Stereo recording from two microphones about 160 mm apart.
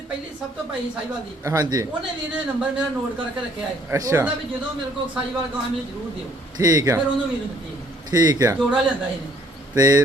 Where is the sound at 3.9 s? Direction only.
20° right (ahead or behind).